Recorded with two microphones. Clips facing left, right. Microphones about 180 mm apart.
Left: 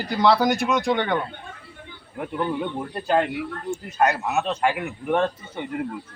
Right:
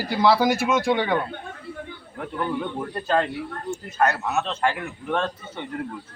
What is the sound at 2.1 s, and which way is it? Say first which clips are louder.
A man's voice: left 2 dB; 15° left (ahead or behind).